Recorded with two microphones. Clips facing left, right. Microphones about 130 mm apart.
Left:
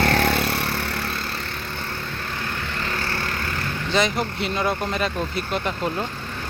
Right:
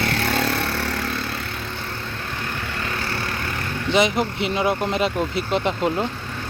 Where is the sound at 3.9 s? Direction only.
20° right (ahead or behind).